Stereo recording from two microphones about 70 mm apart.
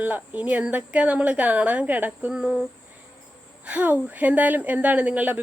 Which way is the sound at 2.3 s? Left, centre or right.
Centre.